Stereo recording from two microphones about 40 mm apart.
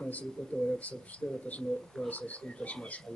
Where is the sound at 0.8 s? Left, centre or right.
Left.